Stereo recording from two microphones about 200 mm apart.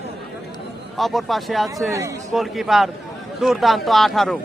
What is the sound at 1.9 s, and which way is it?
Speech, 15° right (ahead or behind).